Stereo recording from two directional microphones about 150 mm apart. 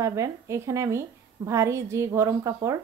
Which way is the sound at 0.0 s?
20° right (ahead or behind).